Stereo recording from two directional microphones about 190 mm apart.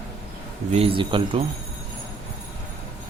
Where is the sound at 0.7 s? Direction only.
30° right (ahead or behind).